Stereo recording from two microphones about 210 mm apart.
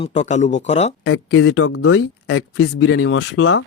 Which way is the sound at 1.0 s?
60° left (ahead or behind).